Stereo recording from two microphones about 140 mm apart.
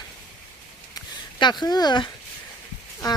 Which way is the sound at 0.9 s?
30° left (ahead or behind).